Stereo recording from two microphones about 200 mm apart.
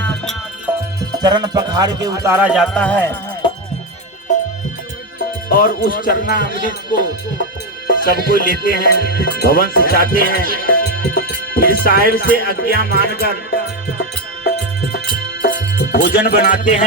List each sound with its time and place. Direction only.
0.0 s music: 5° left (ahead or behind)
1.2 s music: 20° right (ahead or behind)
2.7 s speech: 5° left (ahead or behind)
5.5 s speech: 45° left (ahead or behind)
14.0 s music: 50° left (ahead or behind)